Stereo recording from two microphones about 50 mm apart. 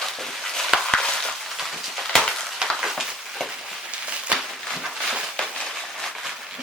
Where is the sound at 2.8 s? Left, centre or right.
Centre.